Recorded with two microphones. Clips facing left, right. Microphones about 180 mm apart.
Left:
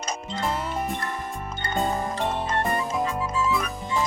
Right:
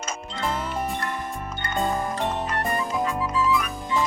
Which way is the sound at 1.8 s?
Centre (ahead or behind).